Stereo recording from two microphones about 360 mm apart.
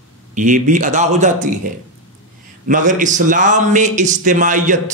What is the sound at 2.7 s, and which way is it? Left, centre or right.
A man's voice, right.